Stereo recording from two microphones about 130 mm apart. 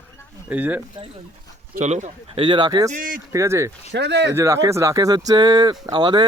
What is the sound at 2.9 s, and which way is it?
Speech, 90° right.